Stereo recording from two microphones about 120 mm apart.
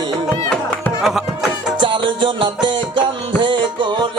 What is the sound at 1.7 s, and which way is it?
Music, 40° right (ahead or behind).